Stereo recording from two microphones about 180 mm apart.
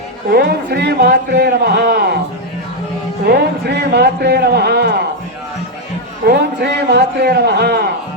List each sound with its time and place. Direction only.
0.3 s a man's voice: 60° right (ahead or behind)
3.2 s a man's voice: 65° right (ahead or behind)
6.2 s a man's voice: 65° right (ahead or behind)